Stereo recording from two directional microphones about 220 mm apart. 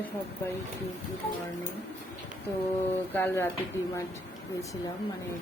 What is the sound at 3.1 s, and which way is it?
Speech, 10° left (ahead or behind).